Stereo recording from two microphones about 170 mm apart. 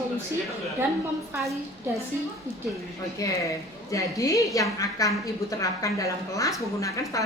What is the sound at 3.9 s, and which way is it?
A woman's voice, 20° left (ahead or behind).